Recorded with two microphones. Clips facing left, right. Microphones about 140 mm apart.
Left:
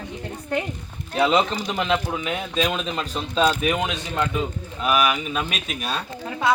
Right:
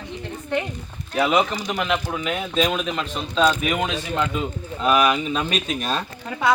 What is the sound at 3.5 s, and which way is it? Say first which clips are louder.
Speech: even; 15° left (ahead or behind).